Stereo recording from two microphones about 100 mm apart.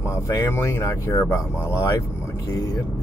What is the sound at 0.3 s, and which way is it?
Speech, 30° left (ahead or behind).